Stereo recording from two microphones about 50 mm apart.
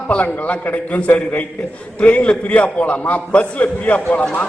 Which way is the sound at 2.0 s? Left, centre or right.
Left.